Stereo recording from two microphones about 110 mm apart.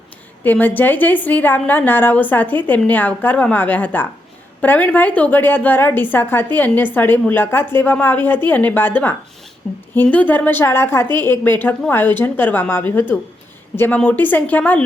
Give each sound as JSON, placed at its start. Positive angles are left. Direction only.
{"t": 0.4, "sound": "a woman's voice", "side_deg": 15}